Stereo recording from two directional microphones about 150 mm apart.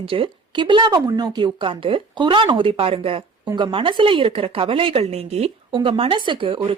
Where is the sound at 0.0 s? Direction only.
35° right (ahead or behind).